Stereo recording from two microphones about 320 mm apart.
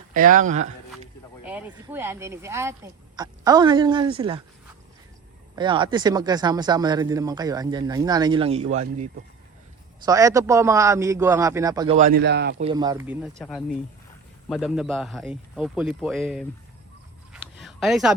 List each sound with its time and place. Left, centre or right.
0.1 s speech: right
1.5 s speech: centre
5.5 s speech: centre
10.1 s speech: centre; by 12.6 s right
12.6 s a man's voice: centre
17.3 s a sound: centre